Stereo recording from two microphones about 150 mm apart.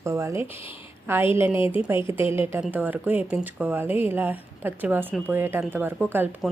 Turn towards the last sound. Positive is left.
turn(degrees=-15)  # may be behind; listen again after turning